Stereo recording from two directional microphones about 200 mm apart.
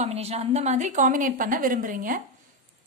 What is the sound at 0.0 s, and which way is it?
A woman's voice, 30° right (ahead or behind).